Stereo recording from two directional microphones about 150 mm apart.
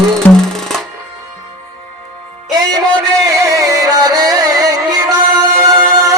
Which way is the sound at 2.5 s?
25° right (ahead or behind).